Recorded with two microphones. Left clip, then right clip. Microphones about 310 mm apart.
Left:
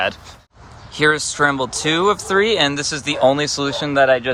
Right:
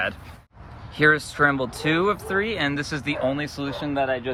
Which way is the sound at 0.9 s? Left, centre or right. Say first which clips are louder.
Left 3 dB; centre.